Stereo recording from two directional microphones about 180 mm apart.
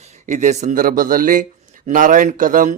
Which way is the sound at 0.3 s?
45° right (ahead or behind).